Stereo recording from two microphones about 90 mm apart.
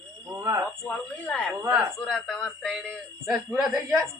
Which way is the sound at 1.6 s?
30° right (ahead or behind).